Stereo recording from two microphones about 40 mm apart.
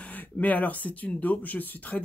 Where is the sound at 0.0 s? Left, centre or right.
Left.